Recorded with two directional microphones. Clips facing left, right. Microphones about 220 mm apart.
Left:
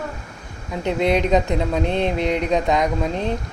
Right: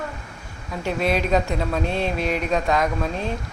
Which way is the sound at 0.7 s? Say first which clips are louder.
Left 3 dB; 20° left (ahead or behind).